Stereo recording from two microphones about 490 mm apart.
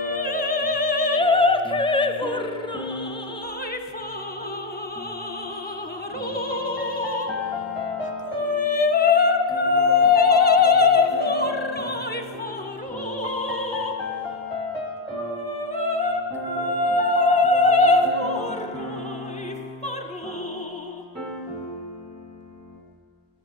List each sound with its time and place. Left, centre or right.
0.1 s opera: centre
6.1 s opera: centre
8.0 s music: centre
16.6 s music: centre